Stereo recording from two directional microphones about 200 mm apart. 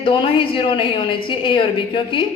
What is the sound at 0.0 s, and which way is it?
A woman's voice, 25° left (ahead or behind).